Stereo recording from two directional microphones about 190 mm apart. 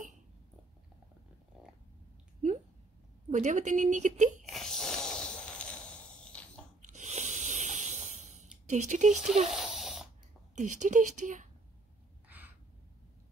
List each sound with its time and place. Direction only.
3.3 s a woman's voice: 40° right (ahead or behind)
4.5 s snort: centre (ahead or behind)
6.8 s a sound: 40° right (ahead or behind)
8.6 s a woman's voice: 40° right (ahead or behind)
9.1 s speech: centre (ahead or behind)
9.5 s a sound: centre (ahead or behind)
10.5 s a woman's voice: 40° right (ahead or behind)